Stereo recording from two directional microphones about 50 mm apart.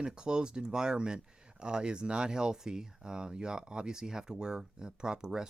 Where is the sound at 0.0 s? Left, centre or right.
Centre.